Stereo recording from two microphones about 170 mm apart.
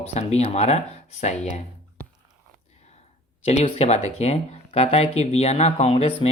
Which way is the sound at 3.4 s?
40° left (ahead or behind).